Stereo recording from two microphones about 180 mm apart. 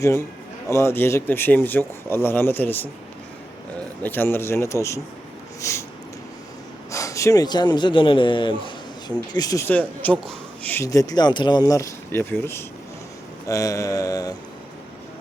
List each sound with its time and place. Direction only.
0.0 s a man's voice: 15° left (ahead or behind)
5.5 s a sound: 15° left (ahead or behind)
6.9 s a man's voice: 15° left (ahead or behind)
13.5 s mantra: 20° left (ahead or behind)